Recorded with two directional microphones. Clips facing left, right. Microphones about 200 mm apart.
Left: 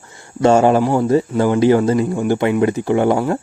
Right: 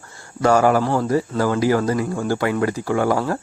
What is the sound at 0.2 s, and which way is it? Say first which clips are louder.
Speech: left 4 dB; 25° left (ahead or behind).